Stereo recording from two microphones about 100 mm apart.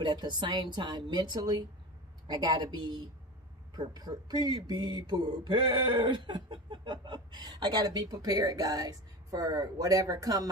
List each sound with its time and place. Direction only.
0.0 s speech: 45° right (ahead or behind)